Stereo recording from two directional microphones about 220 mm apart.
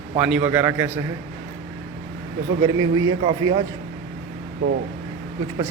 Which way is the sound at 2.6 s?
15° right (ahead or behind).